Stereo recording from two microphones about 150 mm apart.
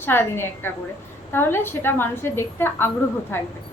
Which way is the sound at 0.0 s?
15° left (ahead or behind).